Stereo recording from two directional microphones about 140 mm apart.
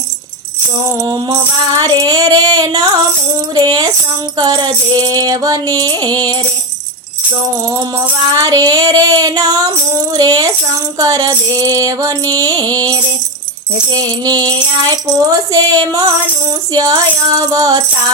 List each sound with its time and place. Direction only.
0.9 s music: 30° right (ahead or behind)
8.3 s music: 25° right (ahead or behind)
11.5 s mantra: 15° left (ahead or behind)
11.8 s music: 25° right (ahead or behind)
14.0 s music: 25° right (ahead or behind)